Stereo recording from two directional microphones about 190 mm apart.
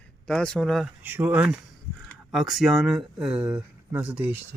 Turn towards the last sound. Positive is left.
turn(degrees=-5)  # may be behind; listen again after turning